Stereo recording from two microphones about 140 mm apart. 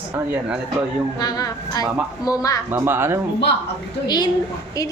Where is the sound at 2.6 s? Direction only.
15° right (ahead or behind).